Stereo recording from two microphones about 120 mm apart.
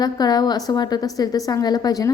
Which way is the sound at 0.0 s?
35° left (ahead or behind).